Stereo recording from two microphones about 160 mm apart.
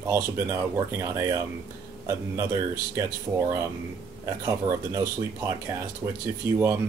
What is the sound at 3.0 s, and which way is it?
Speech, 20° right (ahead or behind).